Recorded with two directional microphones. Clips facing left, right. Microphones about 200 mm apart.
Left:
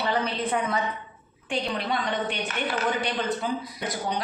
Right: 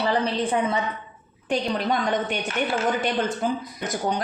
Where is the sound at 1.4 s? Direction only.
40° right (ahead or behind).